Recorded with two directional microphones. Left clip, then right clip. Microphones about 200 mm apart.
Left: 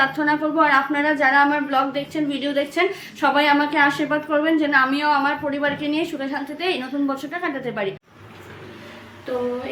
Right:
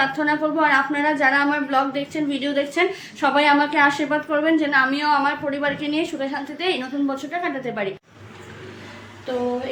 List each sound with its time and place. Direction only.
0.0 s a woman's voice: 5° left (ahead or behind)